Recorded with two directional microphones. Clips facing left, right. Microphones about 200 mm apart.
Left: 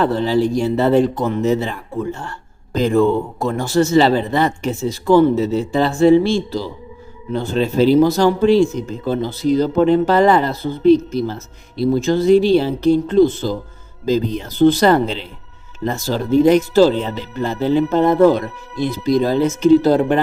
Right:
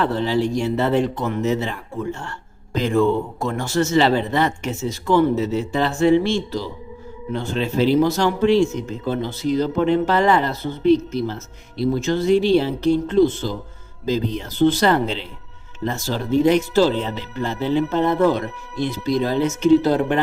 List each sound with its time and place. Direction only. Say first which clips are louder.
0.0 s speech: left 4 dB; 35° left (ahead or behind)
2.7 s speech: left 3 dB; 35° left (ahead or behind)